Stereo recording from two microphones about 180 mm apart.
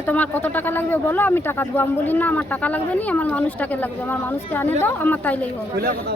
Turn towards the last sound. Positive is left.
turn(degrees=-55)  # may be behind; listen again after turning